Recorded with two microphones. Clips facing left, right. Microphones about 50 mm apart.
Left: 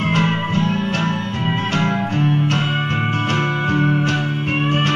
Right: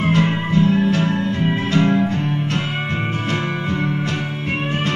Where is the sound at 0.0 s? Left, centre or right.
Left.